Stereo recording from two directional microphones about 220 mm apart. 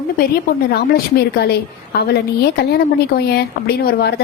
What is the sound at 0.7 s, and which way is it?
A woman's voice, 45° left (ahead or behind).